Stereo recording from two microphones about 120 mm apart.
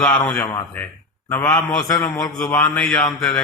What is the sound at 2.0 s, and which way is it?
Speech, 30° left (ahead or behind).